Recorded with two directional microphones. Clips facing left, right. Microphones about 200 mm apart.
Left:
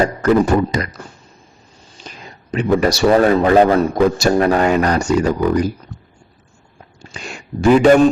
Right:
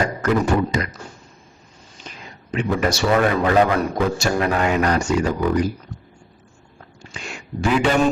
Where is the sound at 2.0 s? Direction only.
35° left (ahead or behind).